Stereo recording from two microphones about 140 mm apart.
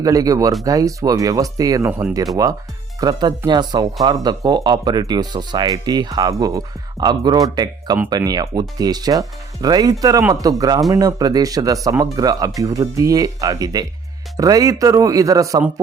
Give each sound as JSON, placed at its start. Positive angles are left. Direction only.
{"t": 0.0, "sound": "speech", "side_deg": -25}